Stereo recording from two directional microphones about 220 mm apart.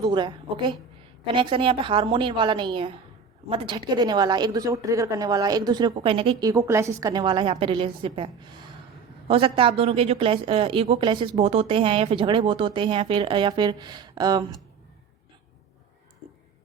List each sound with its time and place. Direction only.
0.0 s speech: 20° right (ahead or behind)